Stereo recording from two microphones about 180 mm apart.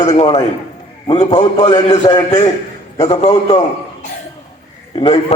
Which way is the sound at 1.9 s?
25° left (ahead or behind).